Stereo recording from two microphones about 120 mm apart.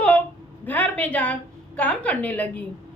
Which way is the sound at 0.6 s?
15° left (ahead or behind).